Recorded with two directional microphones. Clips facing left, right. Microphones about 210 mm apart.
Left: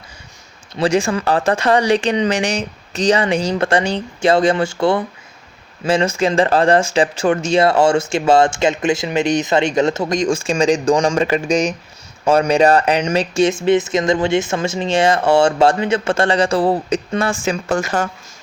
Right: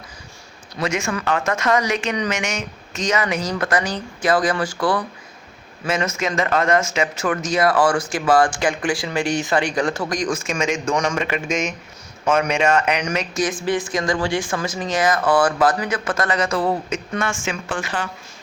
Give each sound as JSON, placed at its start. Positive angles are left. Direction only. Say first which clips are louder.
{"t": 0.8, "sound": "speech", "louder": "left 7 dB", "side_deg": 35}